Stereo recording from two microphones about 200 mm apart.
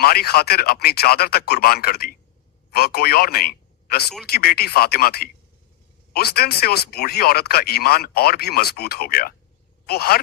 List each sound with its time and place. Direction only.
0.0 s a man's voice: 50° left (ahead or behind)